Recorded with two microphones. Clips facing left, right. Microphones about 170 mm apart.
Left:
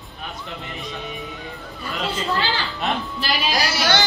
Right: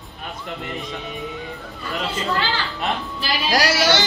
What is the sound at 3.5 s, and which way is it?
Speech, 90° right.